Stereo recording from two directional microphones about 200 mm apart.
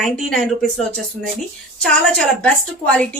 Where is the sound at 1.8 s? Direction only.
5° left (ahead or behind).